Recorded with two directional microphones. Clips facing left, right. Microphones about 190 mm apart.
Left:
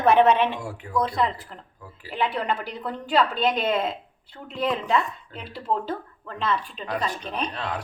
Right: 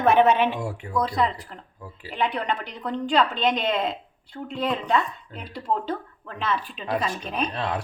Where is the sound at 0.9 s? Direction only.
Centre (ahead or behind).